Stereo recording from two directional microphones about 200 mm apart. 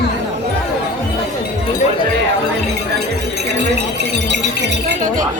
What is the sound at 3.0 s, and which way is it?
Music, 55° right (ahead or behind).